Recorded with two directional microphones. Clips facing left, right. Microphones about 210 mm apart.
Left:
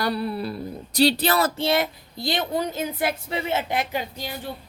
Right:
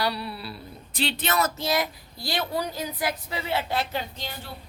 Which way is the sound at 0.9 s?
40° left (ahead or behind).